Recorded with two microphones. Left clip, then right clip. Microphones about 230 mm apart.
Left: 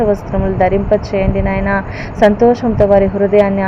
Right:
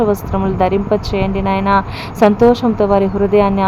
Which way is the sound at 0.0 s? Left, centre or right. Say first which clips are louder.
Left 1 dB; right.